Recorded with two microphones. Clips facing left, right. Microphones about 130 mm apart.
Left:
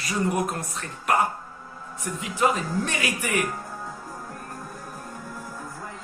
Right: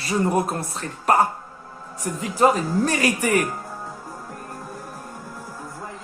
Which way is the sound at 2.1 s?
40° right (ahead or behind).